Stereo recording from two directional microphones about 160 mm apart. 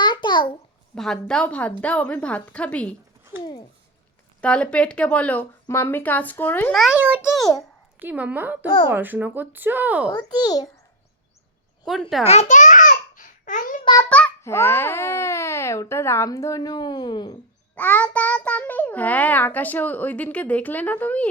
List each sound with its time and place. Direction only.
0.0 s babbling: 30° left (ahead or behind)
0.9 s a woman's voice: 5° left (ahead or behind)
4.4 s a child's voice: 5° left (ahead or behind)
6.7 s a woman's voice: centre (ahead or behind)
7.9 s speech: 10° right (ahead or behind)
10.1 s a child's voice: 25° left (ahead or behind)
12.2 s babbling: 40° left (ahead or behind); by 13.7 s 55° left (ahead or behind)
13.8 s a child's voice: 25° left (ahead or behind)
14.1 s a child's voice: 10° left (ahead or behind); by 17.3 s 30° left (ahead or behind)
17.7 s a child's voice: 10° left (ahead or behind)